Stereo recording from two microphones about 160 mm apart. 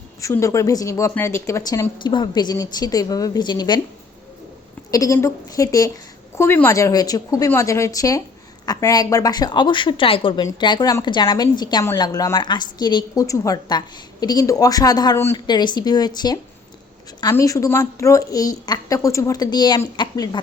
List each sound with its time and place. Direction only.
0.2 s speech: 20° left (ahead or behind)
4.9 s speech: 20° left (ahead or behind)